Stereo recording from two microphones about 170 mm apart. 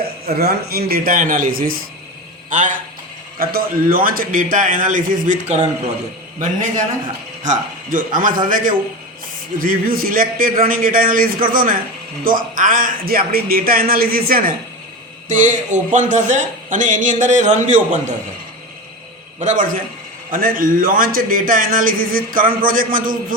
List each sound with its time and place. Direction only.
0.3 s a man's voice: 65° right (ahead or behind)
15.3 s a man's voice: 50° right (ahead or behind)
19.4 s a man's voice: 50° right (ahead or behind)